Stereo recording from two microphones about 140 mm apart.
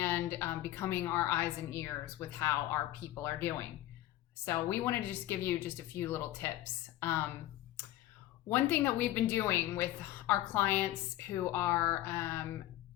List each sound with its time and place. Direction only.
0.0 s a woman's voice: 15° left (ahead or behind)
8.4 s a woman's voice: 15° left (ahead or behind)